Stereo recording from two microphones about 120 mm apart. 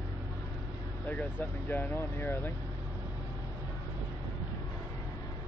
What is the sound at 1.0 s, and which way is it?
Speech, 15° left (ahead or behind).